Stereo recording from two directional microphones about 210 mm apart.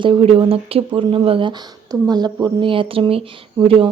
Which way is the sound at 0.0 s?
25° right (ahead or behind).